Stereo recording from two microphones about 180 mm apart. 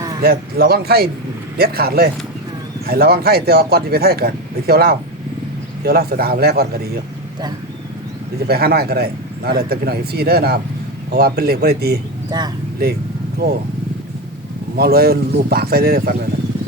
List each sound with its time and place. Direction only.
0.2 s speech: 60° right (ahead or behind)
8.4 s speech: 60° right (ahead or behind)
12.3 s speech: 20° right (ahead or behind)
13.4 s speech: 55° right (ahead or behind)
14.8 s speech: 60° right (ahead or behind)